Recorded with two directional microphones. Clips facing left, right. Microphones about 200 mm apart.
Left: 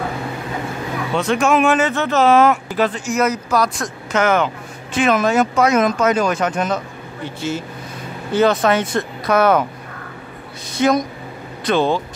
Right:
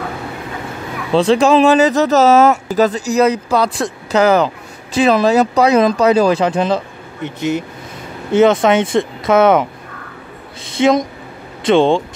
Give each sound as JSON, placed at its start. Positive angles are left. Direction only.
{"t": 1.1, "sound": "speech", "side_deg": -30}
{"t": 7.2, "sound": "speech", "side_deg": -20}
{"t": 10.8, "sound": "speech", "side_deg": -25}